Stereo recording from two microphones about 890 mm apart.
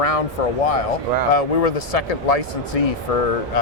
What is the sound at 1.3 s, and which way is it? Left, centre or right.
A man's voice, left.